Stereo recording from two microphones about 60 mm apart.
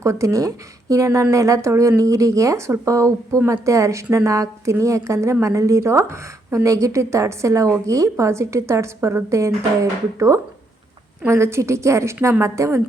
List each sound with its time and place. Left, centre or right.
0.0 s a woman's voice: right
2.0 s a woman's voice: right
8.1 s a woman's voice: right